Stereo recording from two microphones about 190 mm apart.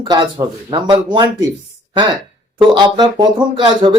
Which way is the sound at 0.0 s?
20° right (ahead or behind).